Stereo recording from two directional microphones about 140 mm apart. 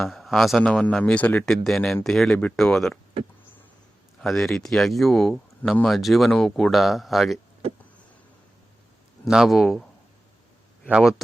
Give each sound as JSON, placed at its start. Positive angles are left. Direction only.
{"t": 0.0, "sound": "speech", "side_deg": 0}
{"t": 4.2, "sound": "speech", "side_deg": 0}
{"t": 9.3, "sound": "speech", "side_deg": -5}
{"t": 10.8, "sound": "speech", "side_deg": -5}